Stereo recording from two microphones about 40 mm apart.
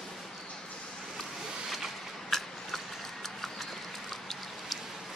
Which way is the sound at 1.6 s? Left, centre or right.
Centre.